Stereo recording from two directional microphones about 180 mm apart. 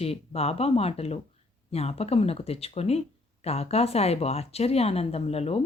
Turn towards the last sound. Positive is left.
turn(degrees=35)  # may be behind; listen again after turning